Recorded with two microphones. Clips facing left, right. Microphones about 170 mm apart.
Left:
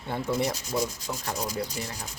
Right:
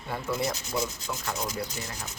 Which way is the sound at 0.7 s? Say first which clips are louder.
Left 2 dB; 35° left (ahead or behind).